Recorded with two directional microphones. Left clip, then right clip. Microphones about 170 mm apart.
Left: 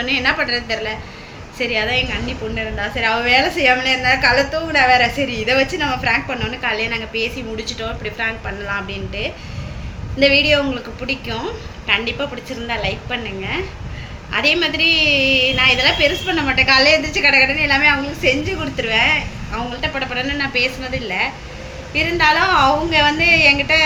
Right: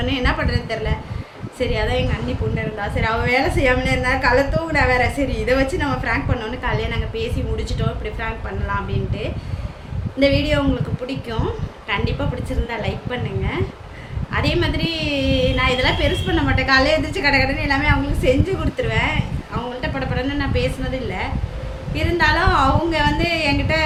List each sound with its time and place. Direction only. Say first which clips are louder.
0.0 s a woman's voice: left 4 dB; 15° right (ahead or behind)
21.9 s a woman's voice: left 3 dB; 15° right (ahead or behind)